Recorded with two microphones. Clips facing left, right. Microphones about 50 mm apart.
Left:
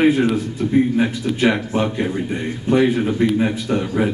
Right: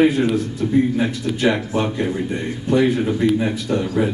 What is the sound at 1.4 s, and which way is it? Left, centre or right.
Speech, left.